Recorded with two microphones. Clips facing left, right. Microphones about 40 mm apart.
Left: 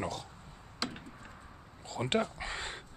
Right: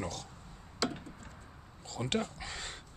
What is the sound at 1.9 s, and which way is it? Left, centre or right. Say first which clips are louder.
Speech: left 3 dB; centre.